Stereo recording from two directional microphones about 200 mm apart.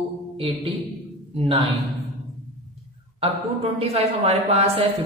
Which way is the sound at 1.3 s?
30° right (ahead or behind).